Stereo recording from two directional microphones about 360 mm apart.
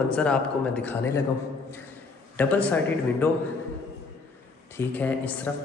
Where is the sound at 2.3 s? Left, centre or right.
Centre.